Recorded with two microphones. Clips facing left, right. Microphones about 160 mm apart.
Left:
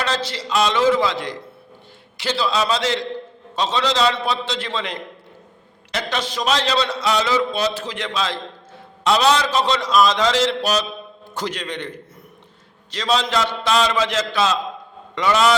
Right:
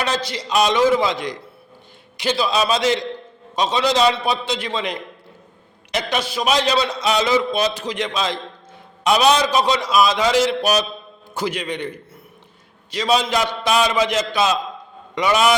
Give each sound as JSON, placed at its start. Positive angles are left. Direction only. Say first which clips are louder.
{"t": 0.0, "sound": "a man's voice", "louder": "right 1 dB", "side_deg": -15}
{"t": 12.9, "sound": "a man's voice", "louder": "right 2 dB", "side_deg": -10}